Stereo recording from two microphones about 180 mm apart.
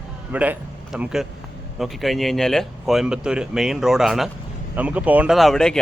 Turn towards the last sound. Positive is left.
turn(degrees=5)  # may be behind; listen again after turning